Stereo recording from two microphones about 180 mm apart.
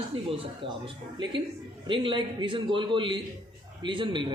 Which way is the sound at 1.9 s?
25° right (ahead or behind).